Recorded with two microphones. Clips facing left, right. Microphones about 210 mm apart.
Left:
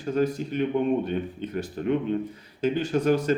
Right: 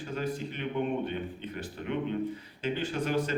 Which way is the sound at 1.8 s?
45° left (ahead or behind).